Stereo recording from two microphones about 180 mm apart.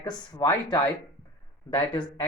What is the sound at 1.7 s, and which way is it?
Speech, 25° left (ahead or behind).